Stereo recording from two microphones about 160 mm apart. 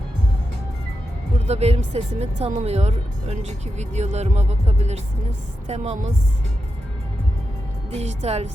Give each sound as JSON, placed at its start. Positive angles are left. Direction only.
{"t": 1.5, "sound": "speech", "side_deg": -40}
{"t": 7.9, "sound": "a woman's voice", "side_deg": -45}